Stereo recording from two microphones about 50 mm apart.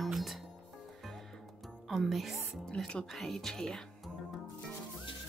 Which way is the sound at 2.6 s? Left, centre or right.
Centre.